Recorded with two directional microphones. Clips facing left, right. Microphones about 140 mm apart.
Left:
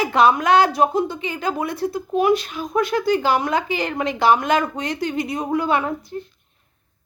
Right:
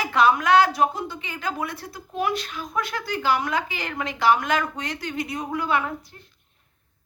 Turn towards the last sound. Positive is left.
turn(degrees=25)  # may be behind; listen again after turning